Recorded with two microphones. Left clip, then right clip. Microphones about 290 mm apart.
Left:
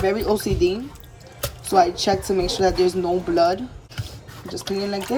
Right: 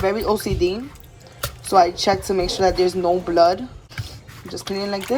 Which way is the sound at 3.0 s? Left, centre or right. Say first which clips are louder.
Right 3 dB; centre.